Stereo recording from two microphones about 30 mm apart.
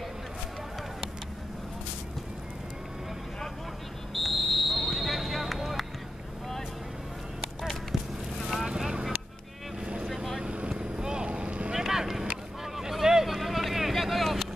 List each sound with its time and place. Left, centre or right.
4.1 s vehicle: centre
8.6 s vehicle: right
10.4 s vehicle: right
10.7 s vehicle: right
11.2 s boat: right
11.7 s vehicle: centre